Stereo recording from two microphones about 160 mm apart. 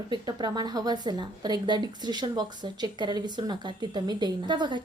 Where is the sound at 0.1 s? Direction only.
25° right (ahead or behind).